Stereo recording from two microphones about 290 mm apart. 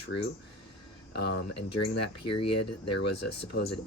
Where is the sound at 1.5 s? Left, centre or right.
Left.